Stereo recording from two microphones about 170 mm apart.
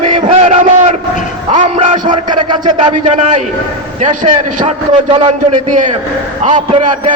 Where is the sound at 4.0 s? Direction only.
40° right (ahead or behind).